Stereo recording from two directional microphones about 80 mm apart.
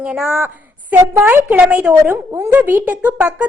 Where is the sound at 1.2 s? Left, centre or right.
Centre.